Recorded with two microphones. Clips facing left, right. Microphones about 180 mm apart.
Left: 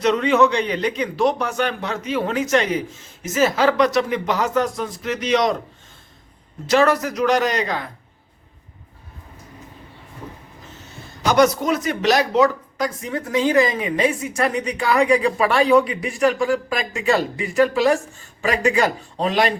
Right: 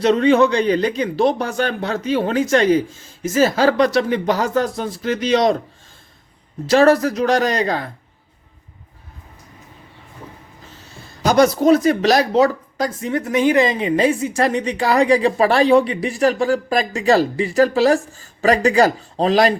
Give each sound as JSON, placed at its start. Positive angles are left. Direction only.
{"t": 0.0, "sound": "a woman's voice", "side_deg": -35}
{"t": 6.7, "sound": "a woman's voice", "side_deg": -30}
{"t": 11.2, "sound": "a woman's voice", "side_deg": -35}
{"t": 13.3, "sound": "a woman's voice", "side_deg": -15}